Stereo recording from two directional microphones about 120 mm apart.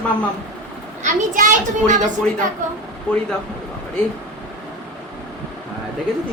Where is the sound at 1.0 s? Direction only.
90° right.